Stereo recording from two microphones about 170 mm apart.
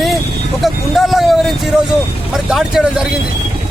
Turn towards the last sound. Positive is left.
turn(degrees=-5)  # may be behind; listen again after turning